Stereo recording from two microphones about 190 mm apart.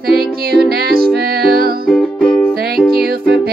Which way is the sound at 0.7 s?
55° right (ahead or behind).